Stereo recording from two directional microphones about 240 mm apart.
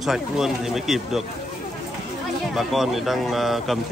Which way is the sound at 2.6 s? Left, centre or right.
Centre.